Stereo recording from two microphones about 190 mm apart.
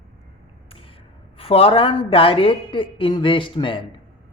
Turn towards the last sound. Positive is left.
turn(degrees=25)  # may be behind; listen again after turning